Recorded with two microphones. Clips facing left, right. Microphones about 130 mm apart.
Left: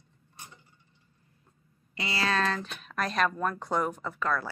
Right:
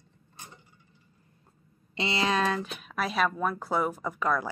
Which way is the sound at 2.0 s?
20° right (ahead or behind).